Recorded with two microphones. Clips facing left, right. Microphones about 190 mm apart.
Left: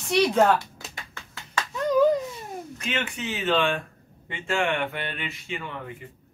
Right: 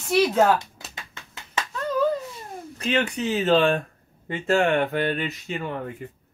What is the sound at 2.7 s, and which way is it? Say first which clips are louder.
Speech: right 8 dB; 35° right (ahead or behind).